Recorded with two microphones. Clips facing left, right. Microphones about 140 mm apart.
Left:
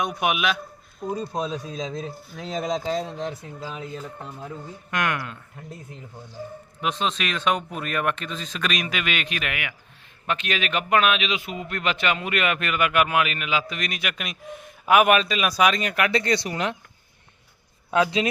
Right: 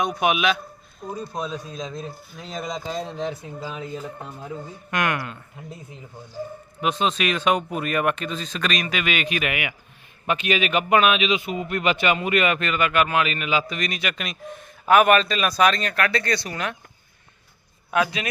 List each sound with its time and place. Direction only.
0.0 s a man's voice: 5° left (ahead or behind)
1.0 s speech: 25° left (ahead or behind)
3.2 s a man's voice: centre (ahead or behind); by 16.7 s 20° left (ahead or behind)
17.9 s speech: 25° left (ahead or behind)